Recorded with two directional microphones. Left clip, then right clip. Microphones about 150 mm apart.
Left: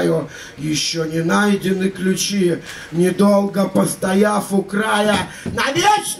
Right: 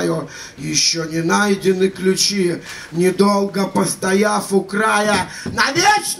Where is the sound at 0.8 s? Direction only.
5° right (ahead or behind).